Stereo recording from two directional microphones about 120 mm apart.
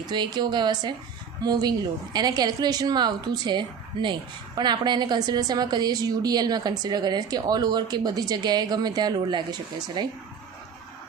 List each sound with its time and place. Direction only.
0.1 s a woman's voice: 35° right (ahead or behind)